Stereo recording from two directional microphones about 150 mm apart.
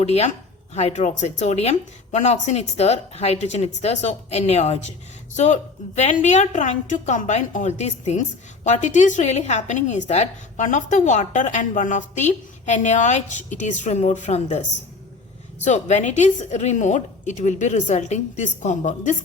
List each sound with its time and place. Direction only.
0.0 s a woman's voice: 45° left (ahead or behind)